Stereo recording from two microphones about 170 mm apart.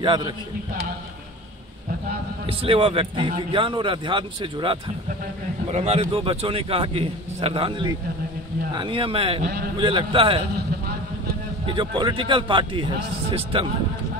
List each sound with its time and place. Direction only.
0.0 s a man's voice: 25° right (ahead or behind)
2.4 s a man's voice: 35° right (ahead or behind)
5.7 s a man's voice: 40° right (ahead or behind)
8.7 s a man's voice: 30° right (ahead or behind)
9.4 s a man's voice: 65° right (ahead or behind)
9.8 s a man's voice: 30° right (ahead or behind)
11.6 s a man's voice: 30° right (ahead or behind)